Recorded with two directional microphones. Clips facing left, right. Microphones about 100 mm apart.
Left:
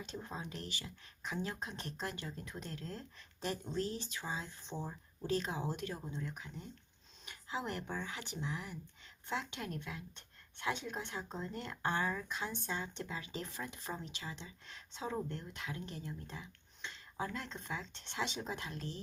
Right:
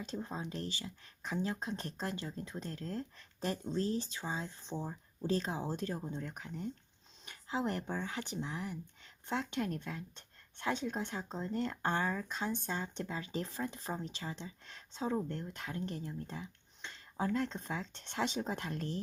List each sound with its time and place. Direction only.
0.0 s speech: 30° right (ahead or behind)
6.1 s speech: 45° right (ahead or behind)
7.3 s speech: 30° right (ahead or behind)
11.5 s speech: 35° right (ahead or behind)